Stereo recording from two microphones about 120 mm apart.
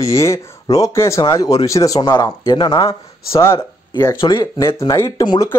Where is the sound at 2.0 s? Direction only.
40° left (ahead or behind).